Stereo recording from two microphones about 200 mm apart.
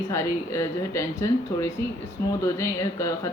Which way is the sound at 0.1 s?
15° left (ahead or behind).